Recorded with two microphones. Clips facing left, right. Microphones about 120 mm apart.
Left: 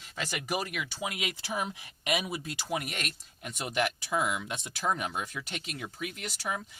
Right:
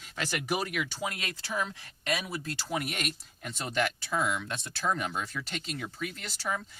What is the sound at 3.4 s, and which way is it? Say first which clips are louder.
Speech: even; 10° left (ahead or behind).